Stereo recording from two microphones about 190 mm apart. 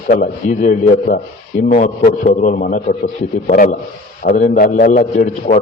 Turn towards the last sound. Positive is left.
turn(degrees=45)  # may be behind; listen again after turning